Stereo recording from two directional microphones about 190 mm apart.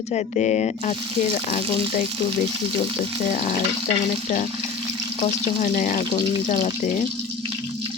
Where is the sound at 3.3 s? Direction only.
45° left (ahead or behind).